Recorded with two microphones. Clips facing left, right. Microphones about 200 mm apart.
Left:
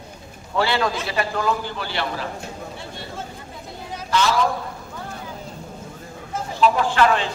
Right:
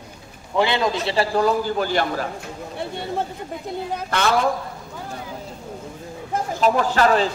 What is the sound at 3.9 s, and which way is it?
Speech, 55° right (ahead or behind).